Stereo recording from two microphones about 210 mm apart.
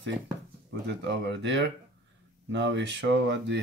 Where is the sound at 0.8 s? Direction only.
55° right (ahead or behind).